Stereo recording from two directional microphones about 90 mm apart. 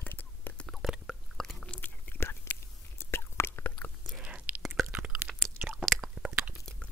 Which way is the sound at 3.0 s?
25° left (ahead or behind).